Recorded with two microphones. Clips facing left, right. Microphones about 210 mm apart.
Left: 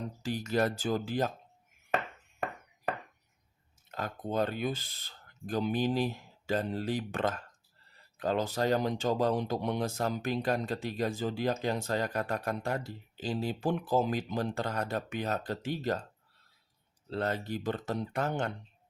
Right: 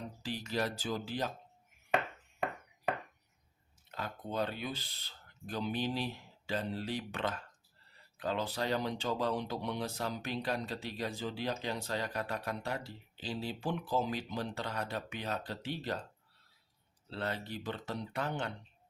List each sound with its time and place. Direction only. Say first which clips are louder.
0.3 s speech: left 6 dB; 45° left (ahead or behind)
3.9 s speech: left 5 dB; 45° left (ahead or behind)
17.1 s speech: left 6 dB; 45° left (ahead or behind)